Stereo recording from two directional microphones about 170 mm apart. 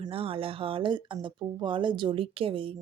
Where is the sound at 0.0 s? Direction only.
35° right (ahead or behind).